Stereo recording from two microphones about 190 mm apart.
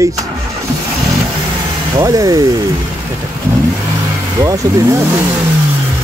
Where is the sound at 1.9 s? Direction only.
20° right (ahead or behind).